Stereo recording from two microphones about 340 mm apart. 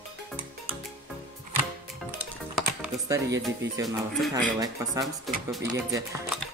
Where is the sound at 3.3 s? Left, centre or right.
Centre.